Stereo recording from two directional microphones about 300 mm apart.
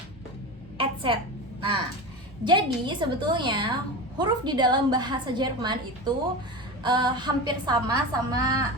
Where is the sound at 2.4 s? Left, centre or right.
Centre.